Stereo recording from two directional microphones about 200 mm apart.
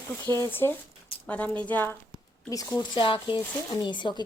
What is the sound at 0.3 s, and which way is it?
Speech, 10° left (ahead or behind).